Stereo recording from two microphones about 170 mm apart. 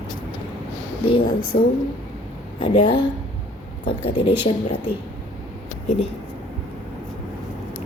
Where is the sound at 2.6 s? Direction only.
30° left (ahead or behind).